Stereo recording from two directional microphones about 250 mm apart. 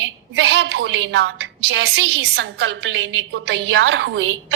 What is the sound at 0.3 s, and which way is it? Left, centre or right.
A woman's voice, right.